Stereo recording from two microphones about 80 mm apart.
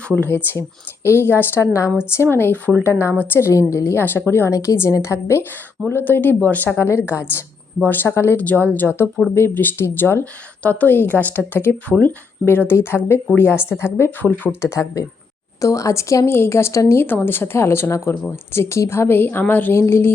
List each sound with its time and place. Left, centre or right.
0.1 s speech: centre
14.6 s speech: left
19.7 s speech: left